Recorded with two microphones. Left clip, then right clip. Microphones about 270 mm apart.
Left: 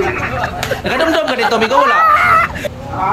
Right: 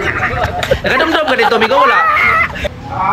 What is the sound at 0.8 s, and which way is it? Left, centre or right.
Speech, centre.